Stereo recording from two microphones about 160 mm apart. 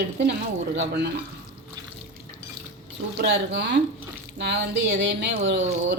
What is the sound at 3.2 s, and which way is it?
A woman's voice, 90° right.